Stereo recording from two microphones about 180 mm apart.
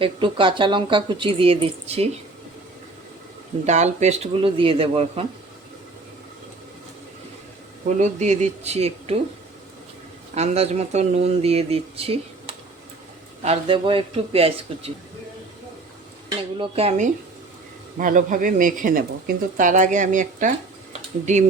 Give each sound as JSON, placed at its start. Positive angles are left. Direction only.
{"t": 0.0, "sound": "speech", "side_deg": -30}
{"t": 3.7, "sound": "speech", "side_deg": -40}
{"t": 7.9, "sound": "speech", "side_deg": -40}
{"t": 10.3, "sound": "speech", "side_deg": -35}
{"t": 16.6, "sound": "speech", "side_deg": -35}
{"t": 17.9, "sound": "a man's voice", "side_deg": -45}